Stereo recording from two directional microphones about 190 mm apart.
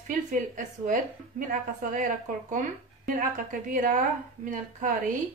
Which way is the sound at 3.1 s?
45° right (ahead or behind).